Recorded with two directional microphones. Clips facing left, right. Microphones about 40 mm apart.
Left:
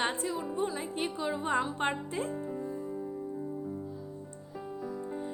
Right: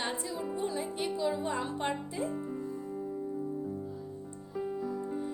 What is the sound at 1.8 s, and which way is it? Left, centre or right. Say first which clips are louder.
Speech: left 1 dB; left.